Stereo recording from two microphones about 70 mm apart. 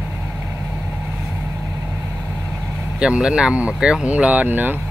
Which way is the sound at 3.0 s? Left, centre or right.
Centre.